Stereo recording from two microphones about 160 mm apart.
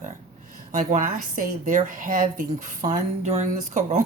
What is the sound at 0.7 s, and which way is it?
Speech, 50° right (ahead or behind).